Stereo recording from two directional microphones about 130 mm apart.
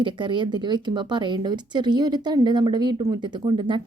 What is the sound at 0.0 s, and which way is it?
A woman's voice, 40° right (ahead or behind).